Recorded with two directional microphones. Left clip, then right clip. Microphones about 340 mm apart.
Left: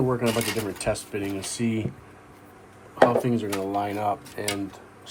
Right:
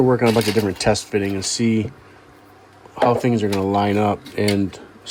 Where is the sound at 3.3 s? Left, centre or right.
Right.